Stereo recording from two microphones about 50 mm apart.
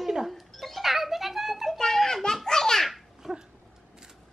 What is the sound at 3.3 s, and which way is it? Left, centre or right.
Dog, centre.